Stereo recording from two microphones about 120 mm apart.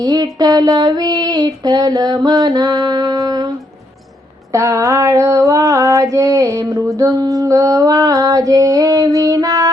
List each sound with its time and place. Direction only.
0.0 s female singing: 35° right (ahead or behind)
4.5 s female singing: 25° right (ahead or behind)